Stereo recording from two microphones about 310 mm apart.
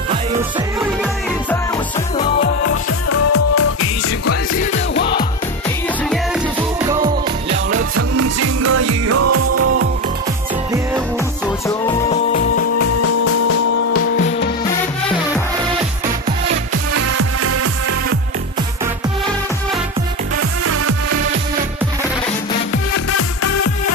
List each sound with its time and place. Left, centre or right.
3.1 s music: left
6.9 s music: centre
7.7 s music: right
12.5 s music: left
16.9 s music: right
20.6 s music: right
22.9 s music: left